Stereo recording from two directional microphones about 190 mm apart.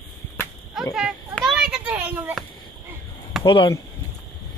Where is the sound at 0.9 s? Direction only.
Centre (ahead or behind).